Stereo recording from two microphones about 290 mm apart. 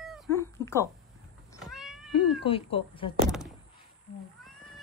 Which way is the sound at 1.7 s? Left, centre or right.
Centre.